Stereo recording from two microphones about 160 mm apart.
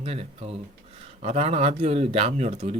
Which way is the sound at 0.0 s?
40° right (ahead or behind).